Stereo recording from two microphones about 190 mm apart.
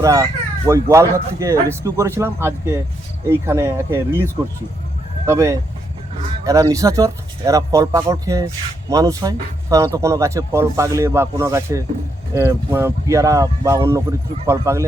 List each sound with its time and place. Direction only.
0.0 s speech: 20° right (ahead or behind)